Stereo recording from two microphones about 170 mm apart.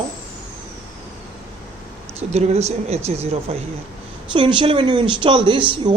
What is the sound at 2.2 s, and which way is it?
A man's voice, 40° right (ahead or behind).